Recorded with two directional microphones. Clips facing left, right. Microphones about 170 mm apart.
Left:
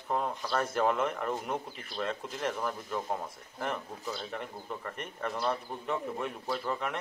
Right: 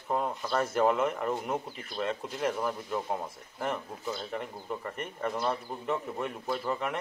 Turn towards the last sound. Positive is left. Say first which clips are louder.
# right 2 dB
turn(degrees=-5)  # may be behind; listen again after turning